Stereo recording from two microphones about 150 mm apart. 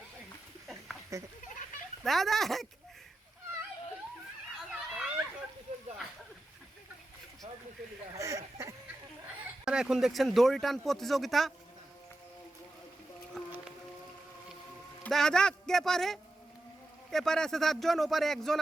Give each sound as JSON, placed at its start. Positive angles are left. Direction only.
{"t": 1.1, "sound": "speech", "side_deg": -20}
{"t": 2.0, "sound": "speech", "side_deg": 0}
{"t": 4.7, "sound": "a sound", "side_deg": -5}
{"t": 8.1, "sound": "speech", "side_deg": -20}
{"t": 9.6, "sound": "speech", "side_deg": -5}
{"t": 15.0, "sound": "speech", "side_deg": 5}